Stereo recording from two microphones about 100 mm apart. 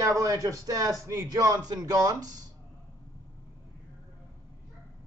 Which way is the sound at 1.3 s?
40° right (ahead or behind).